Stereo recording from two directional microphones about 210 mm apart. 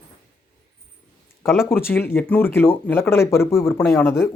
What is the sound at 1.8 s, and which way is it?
Speech, 10° left (ahead or behind).